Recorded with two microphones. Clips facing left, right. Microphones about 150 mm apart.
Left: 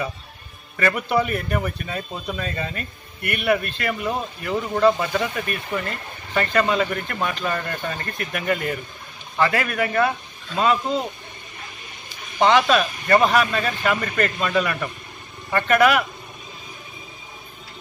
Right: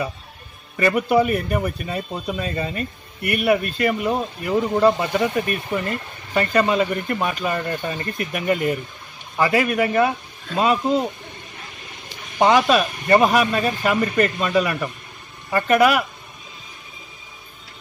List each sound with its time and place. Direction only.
0.7 s speech: 10° right (ahead or behind)
12.4 s speech: 10° right (ahead or behind)